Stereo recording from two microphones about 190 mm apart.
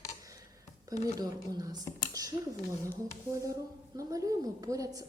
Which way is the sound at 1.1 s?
20° right (ahead or behind).